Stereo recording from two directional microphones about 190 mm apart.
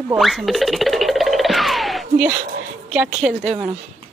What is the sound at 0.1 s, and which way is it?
Music, centre (ahead or behind).